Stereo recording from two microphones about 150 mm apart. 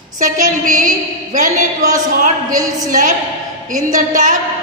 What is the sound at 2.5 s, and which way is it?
Speech, 25° right (ahead or behind).